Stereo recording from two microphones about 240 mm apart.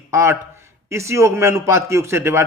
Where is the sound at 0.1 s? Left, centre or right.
Centre.